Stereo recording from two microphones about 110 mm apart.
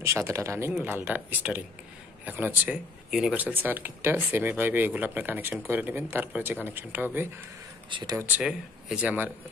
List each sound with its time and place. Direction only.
0.3 s speech: 25° right (ahead or behind)
0.7 s speech: 15° right (ahead or behind)
3.1 s speech: 5° right (ahead or behind)
3.3 s speech: 15° right (ahead or behind)
7.9 s speech: 45° right (ahead or behind)
8.2 s speech: 10° right (ahead or behind)